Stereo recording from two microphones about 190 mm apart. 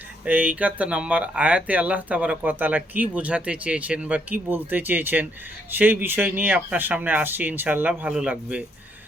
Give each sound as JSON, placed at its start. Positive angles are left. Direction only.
{"t": 0.3, "sound": "speech", "side_deg": -10}